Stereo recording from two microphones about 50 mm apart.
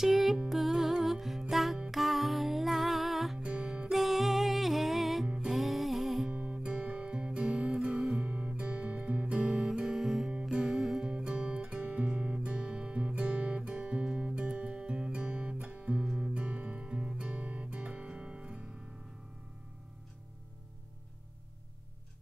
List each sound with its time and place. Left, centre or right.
0.0 s music: centre
3.3 s music: centre
3.9 s music: centre
6.3 s music: right; by 7.8 s centre
8.2 s music: right
9.5 s guitar: centre
9.8 s music: centre
11.1 s music: right
15.9 s music: centre
16.3 s music: right